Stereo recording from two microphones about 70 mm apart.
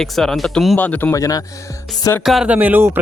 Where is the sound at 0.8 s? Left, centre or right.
Left.